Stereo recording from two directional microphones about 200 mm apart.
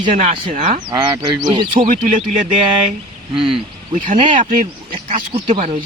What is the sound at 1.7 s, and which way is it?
Speech, 40° right (ahead or behind).